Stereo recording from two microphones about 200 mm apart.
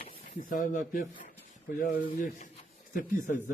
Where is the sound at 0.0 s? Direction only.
45° left (ahead or behind).